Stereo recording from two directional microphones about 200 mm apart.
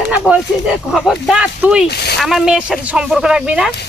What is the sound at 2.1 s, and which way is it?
Speech, centre (ahead or behind).